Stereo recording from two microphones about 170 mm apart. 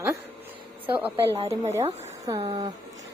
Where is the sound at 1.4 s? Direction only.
40° right (ahead or behind).